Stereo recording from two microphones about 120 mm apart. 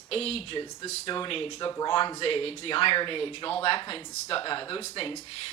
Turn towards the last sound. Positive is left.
turn(degrees=50)  # may be behind; listen again after turning